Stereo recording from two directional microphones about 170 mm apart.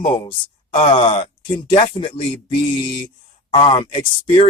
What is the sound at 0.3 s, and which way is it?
Speech, 30° left (ahead or behind).